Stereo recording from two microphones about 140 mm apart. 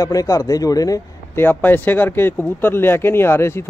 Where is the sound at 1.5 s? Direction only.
15° left (ahead or behind).